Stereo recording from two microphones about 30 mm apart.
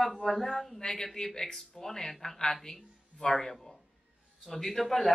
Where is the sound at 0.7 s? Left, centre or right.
Centre.